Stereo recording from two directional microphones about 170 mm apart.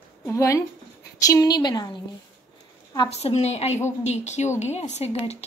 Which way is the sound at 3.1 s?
40° left (ahead or behind).